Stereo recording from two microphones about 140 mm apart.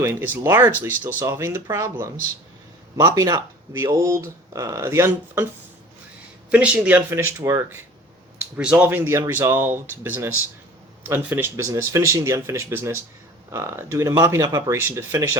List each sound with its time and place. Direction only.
0.0 s speech: 15° right (ahead or behind)
2.9 s speech: 30° right (ahead or behind)
3.7 s speech: 20° right (ahead or behind)
6.5 s speech: 10° right (ahead or behind)